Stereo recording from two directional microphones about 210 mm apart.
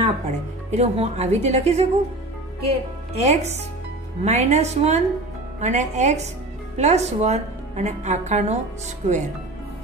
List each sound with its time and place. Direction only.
0.0 s speech: 30° right (ahead or behind)